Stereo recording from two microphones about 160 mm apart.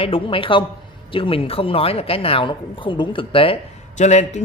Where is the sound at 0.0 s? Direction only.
35° left (ahead or behind).